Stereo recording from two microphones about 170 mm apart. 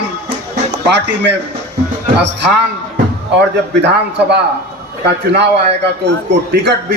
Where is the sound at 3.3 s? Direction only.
85° right.